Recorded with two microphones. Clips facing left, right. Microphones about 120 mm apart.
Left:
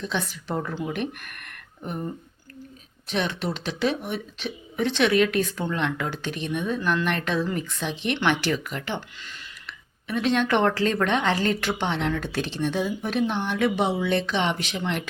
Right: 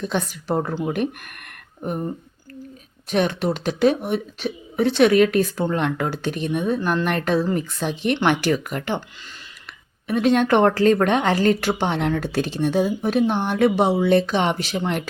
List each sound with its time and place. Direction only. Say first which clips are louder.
0.0 s speech: right 4 dB; 50° right (ahead or behind)
1.4 s a sound: right 6 dB; 45° right (ahead or behind)
3.1 s speech: right 6 dB; 45° right (ahead or behind)